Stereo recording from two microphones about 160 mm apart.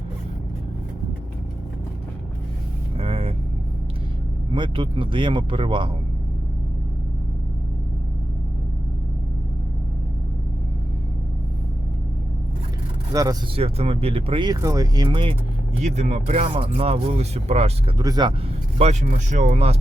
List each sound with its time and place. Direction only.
3.0 s vehicle: 35° right (ahead or behind)
4.5 s speech: 30° right (ahead or behind)
13.1 s speech: 20° right (ahead or behind)
13.6 s speech: 40° right (ahead or behind)
15.8 s speech: 45° right (ahead or behind)
17.9 s speech: 25° right (ahead or behind)
18.8 s speech: 45° right (ahead or behind)